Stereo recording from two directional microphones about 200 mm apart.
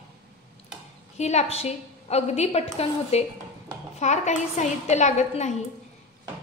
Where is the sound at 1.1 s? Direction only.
35° left (ahead or behind).